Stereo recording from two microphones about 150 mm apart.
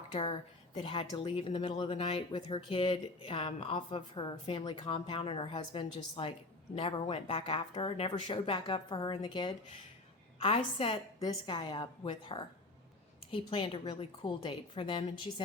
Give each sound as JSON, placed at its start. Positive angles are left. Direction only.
{"t": 0.8, "sound": "speech", "side_deg": 35}